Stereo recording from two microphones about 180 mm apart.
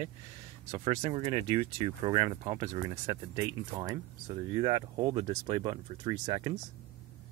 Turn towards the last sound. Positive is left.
turn(degrees=-25)  # may be behind; listen again after turning